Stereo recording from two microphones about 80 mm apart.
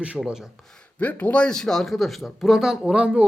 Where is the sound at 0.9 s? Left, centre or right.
Centre.